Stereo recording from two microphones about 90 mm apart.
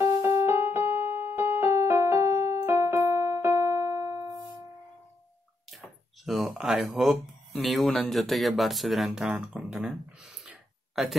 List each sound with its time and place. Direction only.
0.0 s music: 40° right (ahead or behind)
0.5 s keyboard: 25° right (ahead or behind)
6.2 s speech: centre (ahead or behind)
11.0 s speech: 5° right (ahead or behind)